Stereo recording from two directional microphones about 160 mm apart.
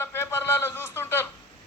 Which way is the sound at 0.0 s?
15° left (ahead or behind).